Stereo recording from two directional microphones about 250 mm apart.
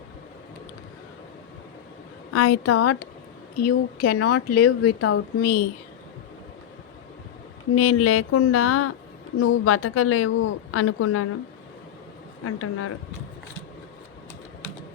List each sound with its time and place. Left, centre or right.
2.3 s speech: left
7.8 s a woman's voice: left
12.5 s a woman's voice: left